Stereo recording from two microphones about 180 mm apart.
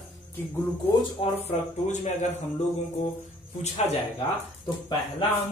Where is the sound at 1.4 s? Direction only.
40° left (ahead or behind).